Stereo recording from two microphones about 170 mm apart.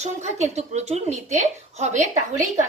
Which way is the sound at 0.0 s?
40° right (ahead or behind).